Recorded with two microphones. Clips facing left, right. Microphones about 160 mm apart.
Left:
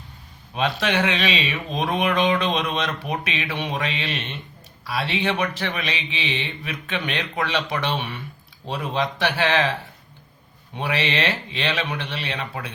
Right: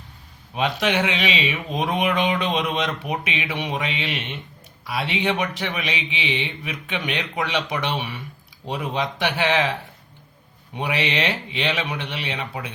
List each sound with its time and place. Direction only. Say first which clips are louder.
0.5 s speech: right 1 dB; 20° right (ahead or behind)
10.8 s speech: even; 15° right (ahead or behind)